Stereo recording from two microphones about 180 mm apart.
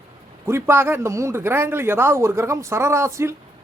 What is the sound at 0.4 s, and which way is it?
Speech, 15° right (ahead or behind).